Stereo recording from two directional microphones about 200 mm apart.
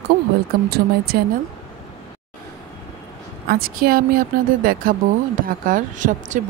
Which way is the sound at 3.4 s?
50° right (ahead or behind).